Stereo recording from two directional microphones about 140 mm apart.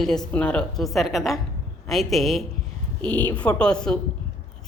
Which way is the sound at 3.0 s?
35° right (ahead or behind).